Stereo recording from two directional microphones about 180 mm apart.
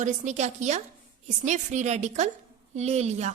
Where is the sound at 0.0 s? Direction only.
40° right (ahead or behind).